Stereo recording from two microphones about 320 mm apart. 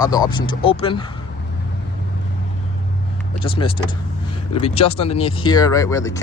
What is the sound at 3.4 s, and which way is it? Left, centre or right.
Speech, centre.